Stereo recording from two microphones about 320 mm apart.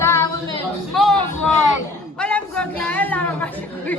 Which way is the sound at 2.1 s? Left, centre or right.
Centre.